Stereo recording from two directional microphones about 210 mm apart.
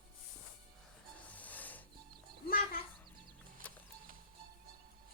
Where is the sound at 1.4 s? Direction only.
10° left (ahead or behind).